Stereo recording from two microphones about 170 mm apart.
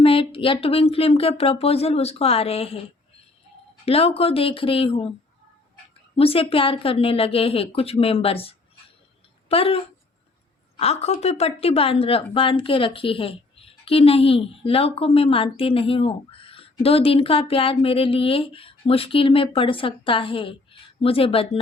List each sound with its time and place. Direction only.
0.0 s a woman's voice: 30° left (ahead or behind)
3.8 s a woman's voice: 35° left (ahead or behind)
6.1 s a woman's voice: 35° left (ahead or behind)